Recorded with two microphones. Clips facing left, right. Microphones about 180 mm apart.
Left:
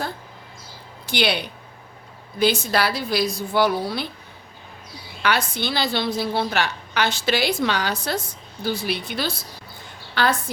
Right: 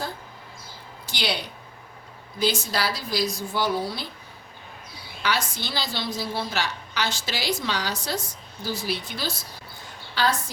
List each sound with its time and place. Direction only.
1.0 s a woman's voice: 60° left (ahead or behind)
5.2 s a woman's voice: 60° left (ahead or behind)